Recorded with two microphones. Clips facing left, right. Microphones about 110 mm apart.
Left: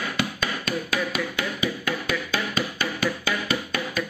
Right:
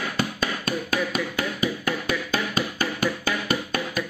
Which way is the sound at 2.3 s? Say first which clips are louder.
Right 1 dB; 45° right (ahead or behind).